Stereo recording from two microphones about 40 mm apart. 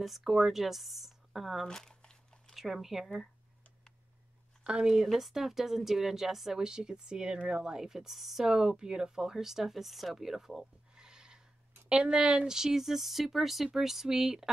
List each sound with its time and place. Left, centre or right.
0.2 s speech: centre
1.6 s crumpling: centre
2.5 s speech: centre
4.8 s speech: centre
6.6 s speech: centre